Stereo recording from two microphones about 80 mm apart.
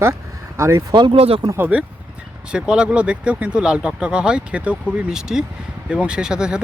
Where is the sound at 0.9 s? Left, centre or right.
Right.